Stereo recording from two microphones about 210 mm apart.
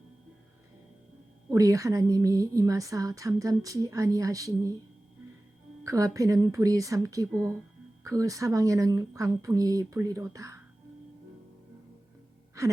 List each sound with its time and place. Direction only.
1.5 s a woman's voice: 15° right (ahead or behind)
5.8 s a woman's voice: 15° right (ahead or behind)